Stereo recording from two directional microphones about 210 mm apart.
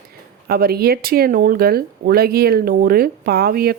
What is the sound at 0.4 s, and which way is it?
Speech, 45° right (ahead or behind).